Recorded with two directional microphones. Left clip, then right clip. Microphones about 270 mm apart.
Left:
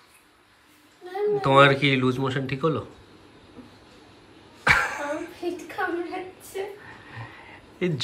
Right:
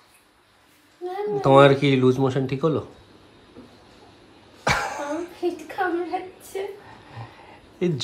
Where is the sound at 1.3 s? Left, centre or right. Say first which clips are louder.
Right 3 dB; centre.